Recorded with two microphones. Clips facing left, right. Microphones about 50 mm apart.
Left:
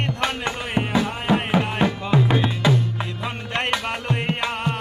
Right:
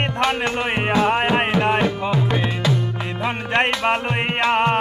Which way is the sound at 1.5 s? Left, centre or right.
Centre.